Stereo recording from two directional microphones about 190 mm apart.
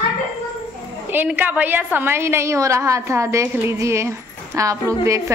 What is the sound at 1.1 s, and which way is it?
A woman's voice, 10° right (ahead or behind).